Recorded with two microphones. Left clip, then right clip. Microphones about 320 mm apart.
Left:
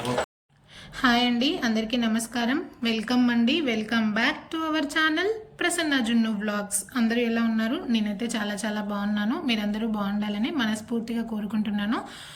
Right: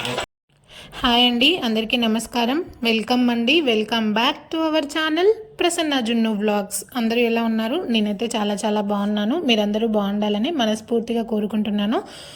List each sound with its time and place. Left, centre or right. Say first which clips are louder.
0.9 s a woman's voice: right 6 dB; right